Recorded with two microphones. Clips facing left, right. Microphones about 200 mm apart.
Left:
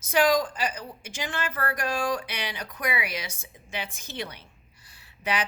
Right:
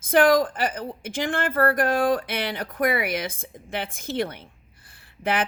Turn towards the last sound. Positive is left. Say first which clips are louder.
# right 4 dB
turn(degrees=-55)  # may be behind; listen again after turning